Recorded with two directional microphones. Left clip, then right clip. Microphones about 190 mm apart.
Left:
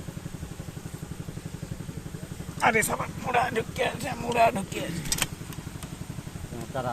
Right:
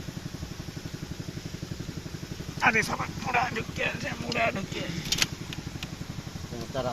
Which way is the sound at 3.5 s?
40° left (ahead or behind).